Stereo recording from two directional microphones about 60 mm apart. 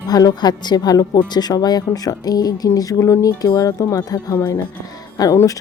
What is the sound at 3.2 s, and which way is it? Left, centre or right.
Speech, left.